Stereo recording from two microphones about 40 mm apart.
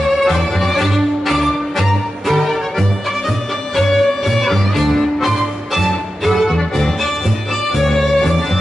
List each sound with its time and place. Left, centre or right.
0.2 s music: centre
3.7 s music: centre